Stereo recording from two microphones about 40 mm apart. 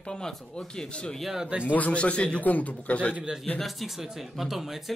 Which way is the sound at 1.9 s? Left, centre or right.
Left.